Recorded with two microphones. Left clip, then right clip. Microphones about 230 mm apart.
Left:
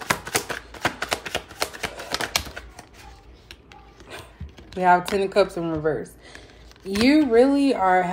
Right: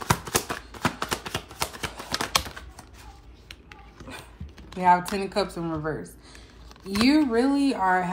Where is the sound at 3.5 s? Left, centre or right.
Right.